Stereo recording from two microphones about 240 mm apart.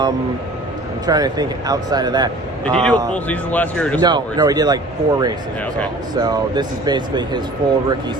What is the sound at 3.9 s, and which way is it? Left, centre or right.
Speech, centre.